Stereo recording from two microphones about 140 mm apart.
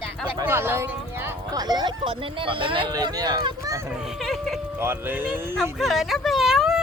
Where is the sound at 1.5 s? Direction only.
30° right (ahead or behind).